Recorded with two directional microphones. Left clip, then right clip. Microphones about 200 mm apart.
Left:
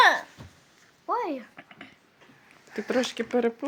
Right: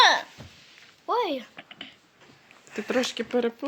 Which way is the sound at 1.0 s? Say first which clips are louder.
Right 3 dB; 35° right (ahead or behind).